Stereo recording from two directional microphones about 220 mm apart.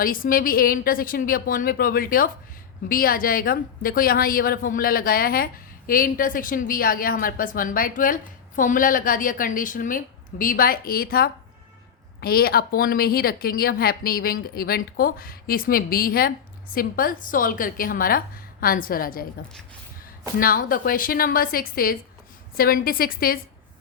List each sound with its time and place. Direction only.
0.0 s a woman's voice: 40° left (ahead or behind)
20.4 s a woman's voice: 40° left (ahead or behind)